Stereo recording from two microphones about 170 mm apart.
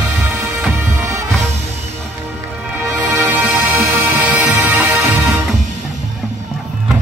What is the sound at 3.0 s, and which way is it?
Music, 10° right (ahead or behind).